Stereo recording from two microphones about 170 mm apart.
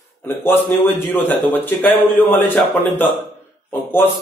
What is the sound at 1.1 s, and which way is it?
A man's voice, 10° left (ahead or behind).